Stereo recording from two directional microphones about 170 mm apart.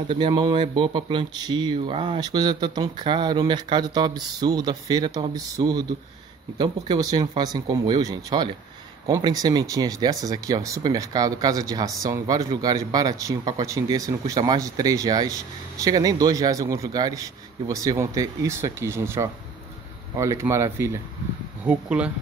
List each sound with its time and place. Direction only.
0.1 s speech: 25° right (ahead or behind); by 22.1 s 5° right (ahead or behind)